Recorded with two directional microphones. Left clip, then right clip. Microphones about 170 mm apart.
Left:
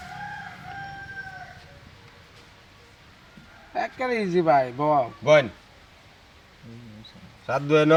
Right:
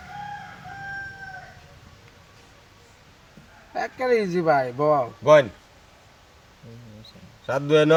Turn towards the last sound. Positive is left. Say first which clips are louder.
# right 1 dB
turn(degrees=-25)  # may be behind; listen again after turning